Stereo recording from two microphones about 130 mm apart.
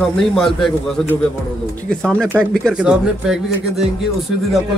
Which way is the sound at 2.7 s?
5° right (ahead or behind).